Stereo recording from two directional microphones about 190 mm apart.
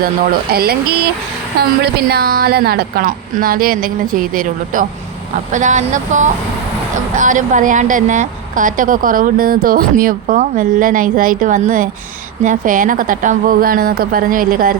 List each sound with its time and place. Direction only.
0.5 s a woman's voice: 55° right (ahead or behind)